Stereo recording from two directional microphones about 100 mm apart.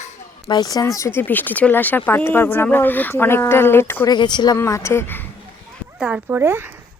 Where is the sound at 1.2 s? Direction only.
15° left (ahead or behind).